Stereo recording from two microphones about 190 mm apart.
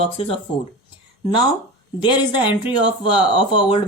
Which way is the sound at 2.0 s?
25° left (ahead or behind).